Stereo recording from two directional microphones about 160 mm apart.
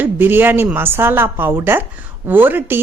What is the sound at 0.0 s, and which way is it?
A woman's voice, 15° right (ahead or behind).